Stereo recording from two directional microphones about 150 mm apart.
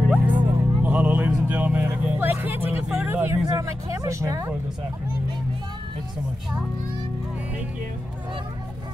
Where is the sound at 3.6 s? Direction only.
20° right (ahead or behind).